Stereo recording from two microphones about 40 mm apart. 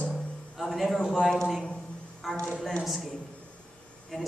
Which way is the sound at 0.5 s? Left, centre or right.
Centre.